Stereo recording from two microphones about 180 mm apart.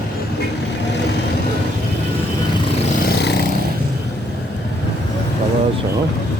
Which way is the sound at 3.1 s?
65° left (ahead or behind).